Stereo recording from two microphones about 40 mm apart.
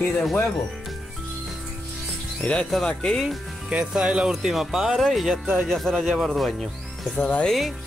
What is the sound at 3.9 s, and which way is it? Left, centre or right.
Music, centre.